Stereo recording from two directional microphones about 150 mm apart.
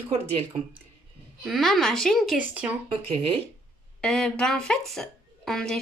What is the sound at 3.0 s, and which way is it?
Speech, 40° right (ahead or behind).